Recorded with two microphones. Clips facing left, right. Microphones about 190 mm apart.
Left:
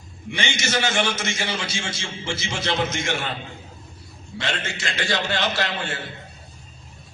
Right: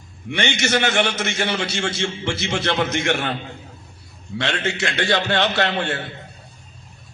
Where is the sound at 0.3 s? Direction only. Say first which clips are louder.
Right 5 dB; 60° right (ahead or behind).